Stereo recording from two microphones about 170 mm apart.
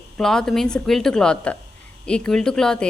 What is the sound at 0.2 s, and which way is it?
A woman's voice, centre (ahead or behind).